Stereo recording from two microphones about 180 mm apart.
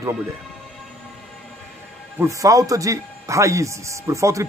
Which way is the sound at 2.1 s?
15° right (ahead or behind).